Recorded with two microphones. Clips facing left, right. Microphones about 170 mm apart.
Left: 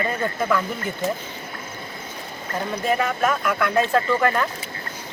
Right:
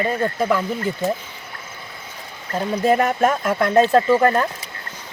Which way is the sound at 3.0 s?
45° right (ahead or behind).